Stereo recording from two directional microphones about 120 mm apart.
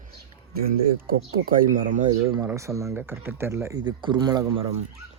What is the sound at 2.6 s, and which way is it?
Speech, 25° right (ahead or behind).